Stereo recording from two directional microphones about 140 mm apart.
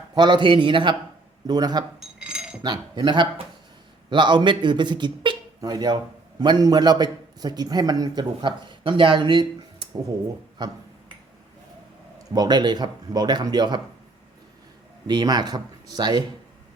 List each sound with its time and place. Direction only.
0.1 s a man's voice: 30° right (ahead or behind)
2.0 s cutlery: 5° right (ahead or behind)
2.6 s a man's voice: 35° right (ahead or behind)
12.3 s a man's voice: 30° right (ahead or behind)
15.0 s a man's voice: 30° right (ahead or behind)